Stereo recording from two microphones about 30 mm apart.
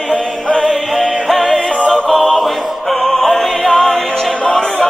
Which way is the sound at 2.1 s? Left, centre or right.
Centre.